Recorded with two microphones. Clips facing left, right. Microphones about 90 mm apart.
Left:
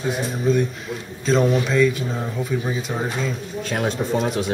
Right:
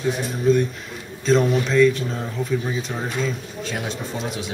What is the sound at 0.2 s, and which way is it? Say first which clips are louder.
A man's voice: right 1 dB; centre (ahead or behind).